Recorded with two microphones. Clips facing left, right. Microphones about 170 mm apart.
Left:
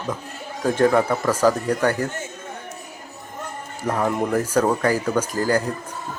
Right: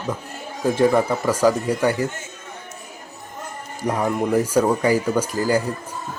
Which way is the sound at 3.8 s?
10° right (ahead or behind).